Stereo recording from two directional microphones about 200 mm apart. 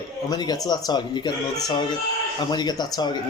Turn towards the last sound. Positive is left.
turn(degrees=20)  # may be behind; listen again after turning